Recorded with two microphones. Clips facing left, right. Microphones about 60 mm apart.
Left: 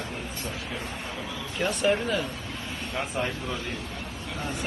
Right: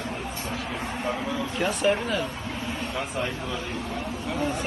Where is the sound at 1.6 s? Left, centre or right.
Centre.